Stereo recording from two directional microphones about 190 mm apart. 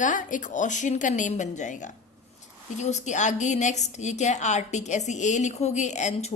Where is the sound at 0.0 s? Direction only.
40° left (ahead or behind).